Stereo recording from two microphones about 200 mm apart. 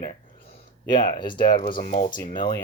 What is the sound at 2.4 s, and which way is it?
Speech, 20° left (ahead or behind).